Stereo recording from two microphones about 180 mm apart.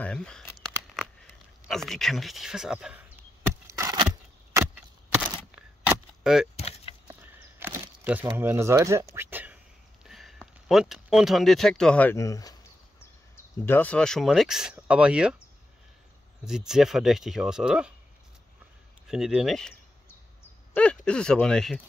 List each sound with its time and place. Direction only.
0.0 s speech: 5° left (ahead or behind)
1.7 s speech: centre (ahead or behind)
3.7 s a sound: 20° right (ahead or behind)
4.6 s a sound: 10° right (ahead or behind)
6.5 s keys jangling: 35° left (ahead or behind)
7.1 s walk: 10° right (ahead or behind)
8.4 s speech: 15° right (ahead or behind)
9.1 s a sound: 10° right (ahead or behind)
10.0 s speech: centre (ahead or behind); by 12.5 s 20° left (ahead or behind)
13.7 s speech: 10° left (ahead or behind)
16.4 s speech: 5° right (ahead or behind)
19.0 s speech: 5° right (ahead or behind)
20.7 s speech: 10° left (ahead or behind)